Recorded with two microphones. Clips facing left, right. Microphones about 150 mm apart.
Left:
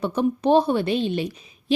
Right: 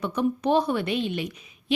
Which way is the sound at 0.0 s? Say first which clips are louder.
Left 3 dB; 30° left (ahead or behind).